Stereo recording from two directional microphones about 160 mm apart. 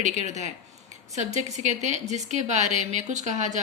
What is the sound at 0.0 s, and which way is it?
A woman's voice, 45° right (ahead or behind).